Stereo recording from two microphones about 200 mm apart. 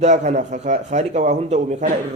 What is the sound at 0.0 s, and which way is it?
A man's voice, 35° right (ahead or behind).